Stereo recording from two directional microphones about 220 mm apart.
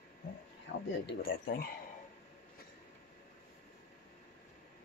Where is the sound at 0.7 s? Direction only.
50° left (ahead or behind).